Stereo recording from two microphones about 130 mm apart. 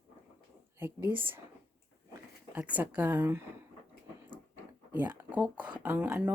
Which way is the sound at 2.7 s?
10° right (ahead or behind).